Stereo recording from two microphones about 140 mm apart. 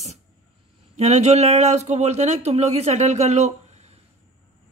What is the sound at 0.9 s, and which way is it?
A woman's voice, 55° right (ahead or behind).